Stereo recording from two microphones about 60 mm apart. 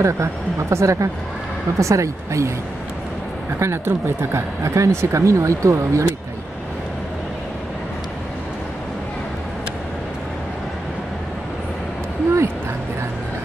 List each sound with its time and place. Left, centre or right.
0.0 s speech: right
3.5 s speech: right
4.6 s speech: right